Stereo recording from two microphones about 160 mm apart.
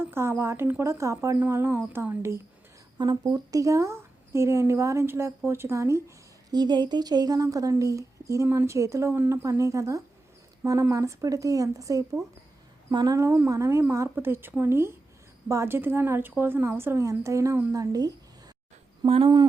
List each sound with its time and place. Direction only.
0.0 s a woman's voice: 15° right (ahead or behind)
19.0 s speech: 40° right (ahead or behind)